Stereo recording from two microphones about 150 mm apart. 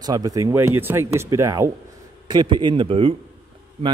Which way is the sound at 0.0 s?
25° right (ahead or behind).